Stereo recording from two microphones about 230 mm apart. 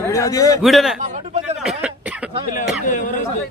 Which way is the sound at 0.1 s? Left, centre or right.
Centre.